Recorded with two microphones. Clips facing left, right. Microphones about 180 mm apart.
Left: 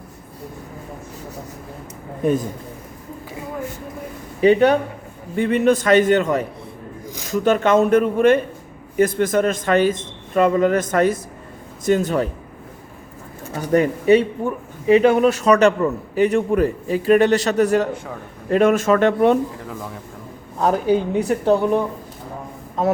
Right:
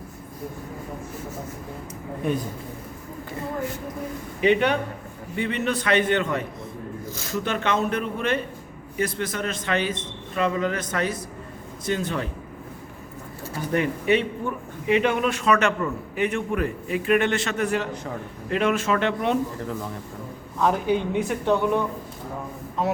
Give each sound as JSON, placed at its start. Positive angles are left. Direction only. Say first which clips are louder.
{"t": 4.4, "sound": "a man's voice", "louder": "left 7 dB", "side_deg": 35}
{"t": 7.0, "sound": "a sound", "louder": "left 1 dB", "side_deg": 15}
{"t": 7.3, "sound": "a man's voice", "louder": "left 9 dB", "side_deg": 45}
{"t": 13.6, "sound": "a man's voice", "louder": "left 7 dB", "side_deg": 40}
{"t": 20.6, "sound": "a man's voice", "louder": "left 4 dB", "side_deg": 40}